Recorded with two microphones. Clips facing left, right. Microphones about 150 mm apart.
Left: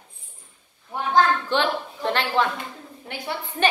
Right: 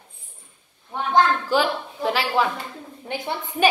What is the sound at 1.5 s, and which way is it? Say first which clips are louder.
A woman's voice: right 2 dB; 5° right (ahead or behind).